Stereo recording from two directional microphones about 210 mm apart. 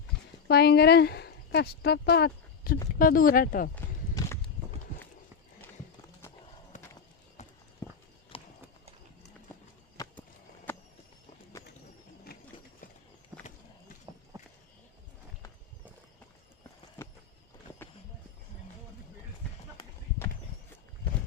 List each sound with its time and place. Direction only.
0.4 s speech: 50° left (ahead or behind)
3.8 s walk: 15° left (ahead or behind)
6.7 s clip-clop: 35° left (ahead or behind)
7.8 s clip-clop: 15° left (ahead or behind)
8.3 s clip-clop: 25° left (ahead or behind)
10.0 s skateboard: 15° left (ahead or behind)
12.3 s sewing machine: 45° left (ahead or behind)
13.3 s run: 15° right (ahead or behind)
14.3 s a sound: 15° right (ahead or behind)